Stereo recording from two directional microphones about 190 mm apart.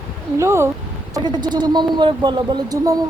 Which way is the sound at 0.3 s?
15° right (ahead or behind).